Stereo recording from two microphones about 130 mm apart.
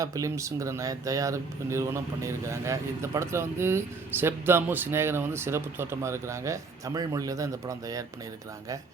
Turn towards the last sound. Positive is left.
turn(degrees=-25)  # may be behind; listen again after turning